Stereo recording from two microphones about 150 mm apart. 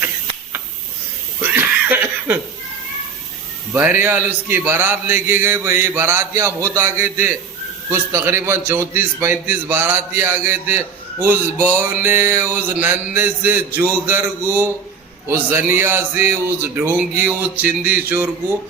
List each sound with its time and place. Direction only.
1.4 s laughter: 15° right (ahead or behind)
3.8 s a man's voice: 15° right (ahead or behind)